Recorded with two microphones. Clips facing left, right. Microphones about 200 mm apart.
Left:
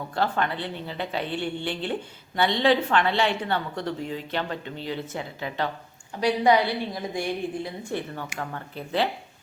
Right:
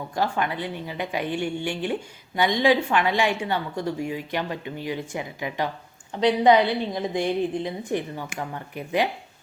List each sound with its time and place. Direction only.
0.1 s a woman's voice: 10° right (ahead or behind)